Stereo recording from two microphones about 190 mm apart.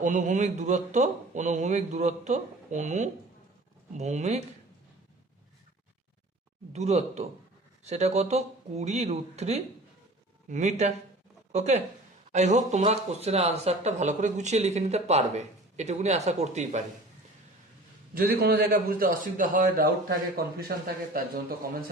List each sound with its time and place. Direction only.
0.0 s speech: 40° right (ahead or behind)
6.7 s speech: 35° right (ahead or behind)
18.1 s a man's voice: 50° right (ahead or behind)